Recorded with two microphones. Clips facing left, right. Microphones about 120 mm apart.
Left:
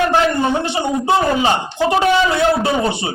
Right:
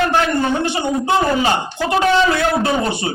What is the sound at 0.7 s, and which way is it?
A man's voice, 20° left (ahead or behind).